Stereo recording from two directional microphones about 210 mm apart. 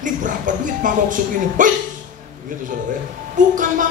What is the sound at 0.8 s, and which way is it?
Speech, 40° right (ahead or behind).